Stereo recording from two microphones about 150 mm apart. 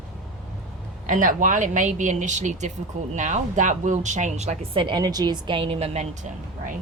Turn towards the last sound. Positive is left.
turn(degrees=-50)  # may be behind; listen again after turning